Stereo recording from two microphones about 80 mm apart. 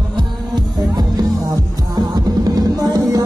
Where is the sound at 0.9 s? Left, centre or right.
Right.